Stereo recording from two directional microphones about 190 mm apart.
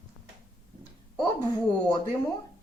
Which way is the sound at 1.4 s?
20° left (ahead or behind).